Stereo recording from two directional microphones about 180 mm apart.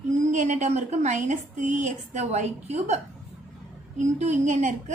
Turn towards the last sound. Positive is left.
turn(degrees=-40)  # may be behind; listen again after turning